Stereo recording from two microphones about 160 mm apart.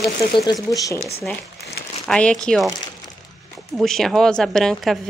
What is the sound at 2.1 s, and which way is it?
Speech, 5° left (ahead or behind).